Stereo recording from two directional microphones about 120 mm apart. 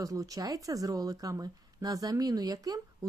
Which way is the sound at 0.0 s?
30° right (ahead or behind).